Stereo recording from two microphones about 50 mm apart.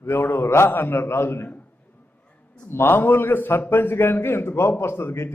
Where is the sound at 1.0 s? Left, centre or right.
Left.